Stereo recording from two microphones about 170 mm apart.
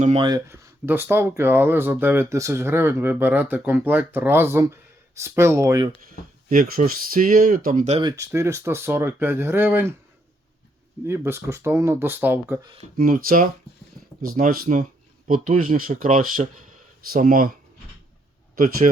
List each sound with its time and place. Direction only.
0.0 s speech: 35° right (ahead or behind)
0.3 s speech: 20° right (ahead or behind)
6.1 s speech: 55° right (ahead or behind)
8.1 s speech: 15° right (ahead or behind)
11.0 s speech: 15° right (ahead or behind)
13.0 s speech: 55° right (ahead or behind)
18.5 s speech: 55° right (ahead or behind)